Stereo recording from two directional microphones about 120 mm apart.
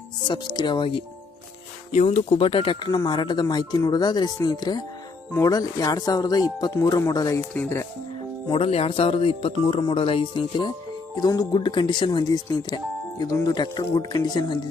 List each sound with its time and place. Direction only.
0.3 s speech: 35° left (ahead or behind)
2.0 s speech: 50° left (ahead or behind); by 7.4 s 30° left (ahead or behind)
7.5 s speech: 15° left (ahead or behind)
8.4 s speech: 50° left (ahead or behind)
11.1 s speech: 30° left (ahead or behind)